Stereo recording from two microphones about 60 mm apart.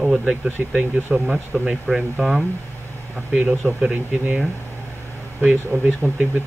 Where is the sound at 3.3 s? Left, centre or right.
Centre.